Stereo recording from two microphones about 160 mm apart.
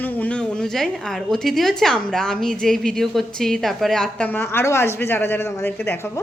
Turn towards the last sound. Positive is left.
turn(degrees=15)  # may be behind; listen again after turning